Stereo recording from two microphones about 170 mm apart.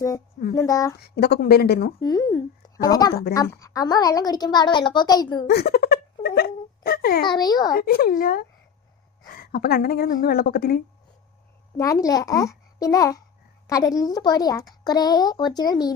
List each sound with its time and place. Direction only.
0.5 s speech: 20° left (ahead or behind)
0.9 s speech: 70° left (ahead or behind)
2.0 s speech: 25° left (ahead or behind)
5.5 s a child's voice: 65° left (ahead or behind)
7.3 s speech: 25° left (ahead or behind)
7.7 s a woman's voice: 60° left (ahead or behind)
11.8 s speech: 20° left (ahead or behind)